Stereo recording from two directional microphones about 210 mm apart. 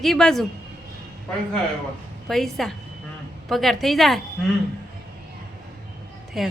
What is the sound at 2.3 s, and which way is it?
A woman's voice, centre (ahead or behind).